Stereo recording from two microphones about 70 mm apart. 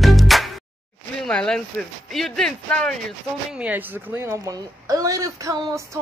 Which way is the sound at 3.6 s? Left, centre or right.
Right.